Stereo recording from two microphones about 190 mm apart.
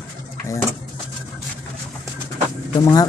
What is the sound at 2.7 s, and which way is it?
Speech, 20° left (ahead or behind).